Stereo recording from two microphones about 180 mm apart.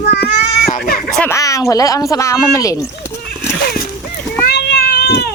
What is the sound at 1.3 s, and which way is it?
Speech, 15° left (ahead or behind).